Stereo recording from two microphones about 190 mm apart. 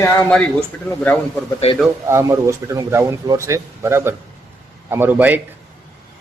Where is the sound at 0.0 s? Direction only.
10° left (ahead or behind).